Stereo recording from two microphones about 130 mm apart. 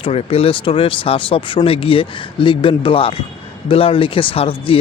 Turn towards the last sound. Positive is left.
turn(degrees=45)  # may be behind; listen again after turning